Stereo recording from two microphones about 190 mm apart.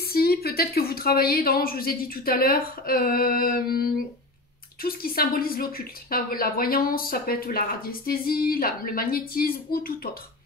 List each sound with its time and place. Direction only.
0.1 s a woman's voice: 55° left (ahead or behind)